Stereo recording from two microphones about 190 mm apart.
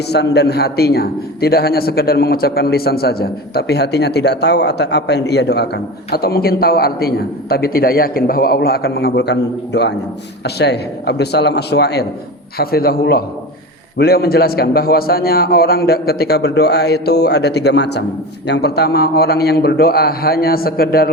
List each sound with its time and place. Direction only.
0.1 s a man's voice: 60° left (ahead or behind)